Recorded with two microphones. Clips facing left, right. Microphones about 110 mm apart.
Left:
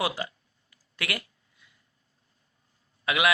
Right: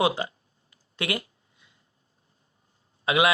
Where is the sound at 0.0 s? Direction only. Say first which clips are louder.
Right 5 dB; 25° right (ahead or behind).